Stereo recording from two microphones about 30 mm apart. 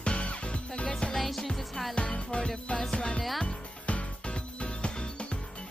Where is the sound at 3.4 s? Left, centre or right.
Left.